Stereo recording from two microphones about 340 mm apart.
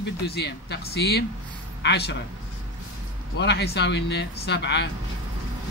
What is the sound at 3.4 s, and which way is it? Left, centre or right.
Speech, left.